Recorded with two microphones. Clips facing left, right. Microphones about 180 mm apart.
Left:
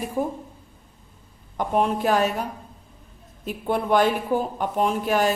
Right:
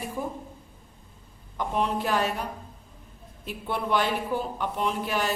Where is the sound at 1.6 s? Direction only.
50° left (ahead or behind).